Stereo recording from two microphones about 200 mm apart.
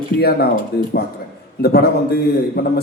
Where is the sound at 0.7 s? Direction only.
50° left (ahead or behind).